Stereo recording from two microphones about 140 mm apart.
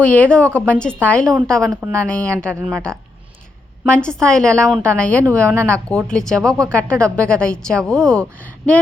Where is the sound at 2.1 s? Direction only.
10° left (ahead or behind).